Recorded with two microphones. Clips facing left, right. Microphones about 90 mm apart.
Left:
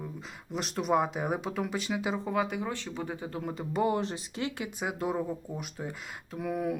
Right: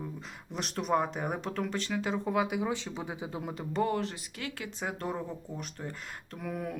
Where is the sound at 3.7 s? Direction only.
15° left (ahead or behind).